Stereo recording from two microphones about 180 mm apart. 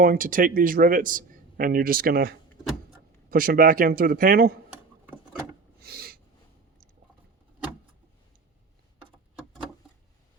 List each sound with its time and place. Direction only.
0.0 s a man's voice: 50° right (ahead or behind)
4.7 s a sound: 10° right (ahead or behind)
5.8 s snort: 60° right (ahead or behind)